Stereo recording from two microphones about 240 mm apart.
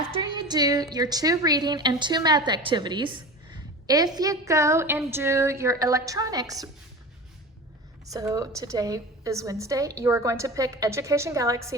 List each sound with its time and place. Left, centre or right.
0.2 s a woman's voice: centre
8.0 s a woman's voice: centre